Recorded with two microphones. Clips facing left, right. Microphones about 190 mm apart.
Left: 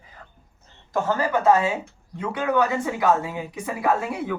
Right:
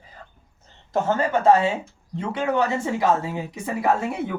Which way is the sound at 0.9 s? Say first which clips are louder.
Right 1 dB; 25° right (ahead or behind).